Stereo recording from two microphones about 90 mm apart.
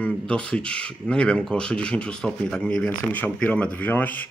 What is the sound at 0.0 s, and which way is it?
Speech, 15° left (ahead or behind).